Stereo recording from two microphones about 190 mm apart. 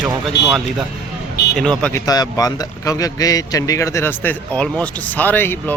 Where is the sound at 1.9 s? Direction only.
20° left (ahead or behind).